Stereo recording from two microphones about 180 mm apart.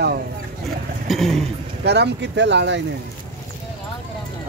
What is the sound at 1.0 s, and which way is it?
Speech, centre (ahead or behind).